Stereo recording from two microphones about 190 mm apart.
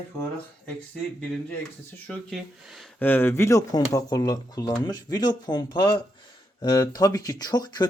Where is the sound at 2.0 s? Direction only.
5° left (ahead or behind).